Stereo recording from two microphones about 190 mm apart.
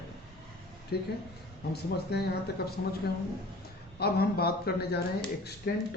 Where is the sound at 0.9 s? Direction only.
55° left (ahead or behind).